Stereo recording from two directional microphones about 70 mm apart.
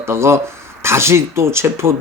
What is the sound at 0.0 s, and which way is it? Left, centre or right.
Speech, right.